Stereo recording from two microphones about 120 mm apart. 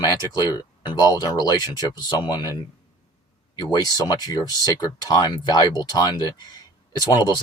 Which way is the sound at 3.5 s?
35° left (ahead or behind).